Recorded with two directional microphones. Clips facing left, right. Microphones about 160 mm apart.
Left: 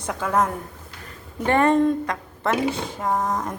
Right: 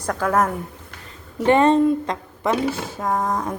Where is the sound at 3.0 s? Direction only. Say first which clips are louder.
Right 1 dB; 5° left (ahead or behind).